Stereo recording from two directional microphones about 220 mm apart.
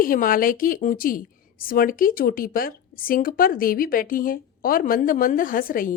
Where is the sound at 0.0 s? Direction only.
40° left (ahead or behind).